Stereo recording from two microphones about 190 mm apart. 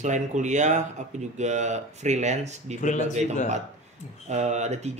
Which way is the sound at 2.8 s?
40° left (ahead or behind).